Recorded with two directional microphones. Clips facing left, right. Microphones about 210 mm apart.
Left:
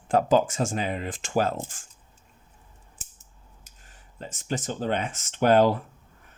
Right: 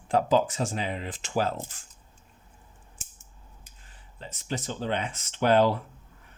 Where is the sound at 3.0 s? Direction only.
40° left (ahead or behind).